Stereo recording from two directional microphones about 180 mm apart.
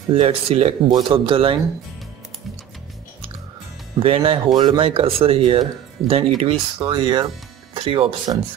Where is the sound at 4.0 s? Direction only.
30° right (ahead or behind).